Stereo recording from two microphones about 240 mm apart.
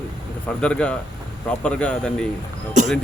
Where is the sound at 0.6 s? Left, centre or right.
Centre.